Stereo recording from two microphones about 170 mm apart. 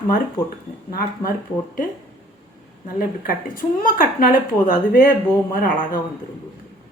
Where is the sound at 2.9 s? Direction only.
55° left (ahead or behind).